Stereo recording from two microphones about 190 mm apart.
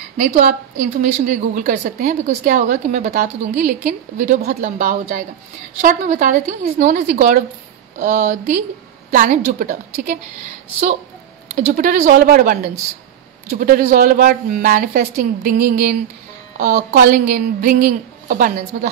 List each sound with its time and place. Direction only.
0.3 s a woman's voice: 45° right (ahead or behind)
11.5 s a woman's voice: 45° right (ahead or behind)
13.6 s a woman's voice: 45° right (ahead or behind)